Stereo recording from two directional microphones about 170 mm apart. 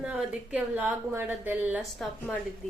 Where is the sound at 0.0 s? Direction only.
5° right (ahead or behind).